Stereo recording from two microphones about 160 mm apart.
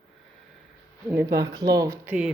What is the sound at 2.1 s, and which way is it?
Speech, 5° right (ahead or behind).